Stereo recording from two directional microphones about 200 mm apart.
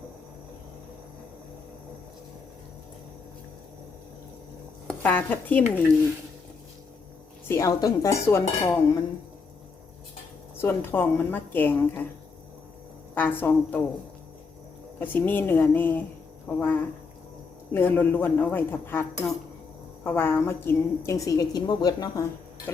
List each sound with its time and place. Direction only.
4.9 s speech: 10° left (ahead or behind)
7.4 s speech: 15° left (ahead or behind)
10.6 s speech: 10° left (ahead or behind)
13.1 s speech: 10° left (ahead or behind)
14.9 s speech: 10° left (ahead or behind)
20.1 s speech: 10° left (ahead or behind)